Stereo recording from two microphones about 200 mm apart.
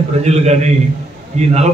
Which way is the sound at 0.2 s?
35° right (ahead or behind).